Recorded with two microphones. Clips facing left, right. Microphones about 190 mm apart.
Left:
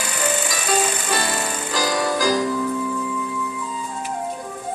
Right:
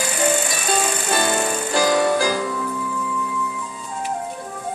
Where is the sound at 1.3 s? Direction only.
30° right (ahead or behind).